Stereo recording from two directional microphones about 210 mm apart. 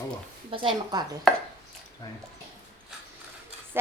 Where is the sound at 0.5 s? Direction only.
25° right (ahead or behind).